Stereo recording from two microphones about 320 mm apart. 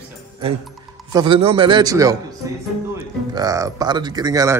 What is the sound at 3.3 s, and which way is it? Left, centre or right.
Speech, centre.